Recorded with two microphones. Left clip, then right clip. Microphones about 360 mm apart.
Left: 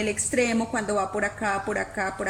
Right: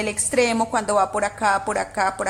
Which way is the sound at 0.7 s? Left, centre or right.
Right.